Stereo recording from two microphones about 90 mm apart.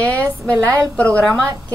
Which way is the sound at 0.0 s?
15° left (ahead or behind).